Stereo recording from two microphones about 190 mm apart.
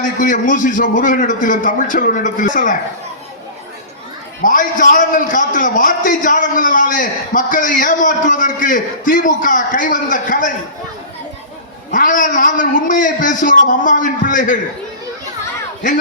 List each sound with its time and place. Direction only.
0.2 s a man's voice: 45° left (ahead or behind)
4.4 s a man's voice: 45° left (ahead or behind)
11.9 s a man's voice: 45° left (ahead or behind)